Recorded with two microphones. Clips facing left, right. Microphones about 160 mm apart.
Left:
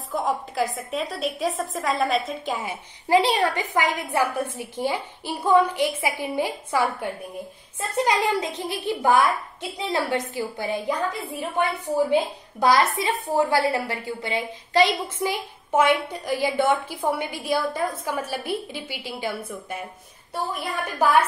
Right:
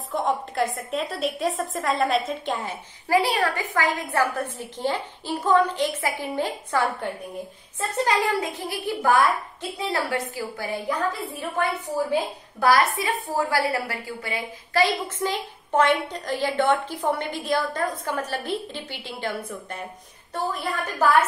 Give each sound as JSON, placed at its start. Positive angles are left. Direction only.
{"t": 0.1, "sound": "a woman's voice", "side_deg": 0}
{"t": 3.1, "sound": "a woman's voice", "side_deg": 20}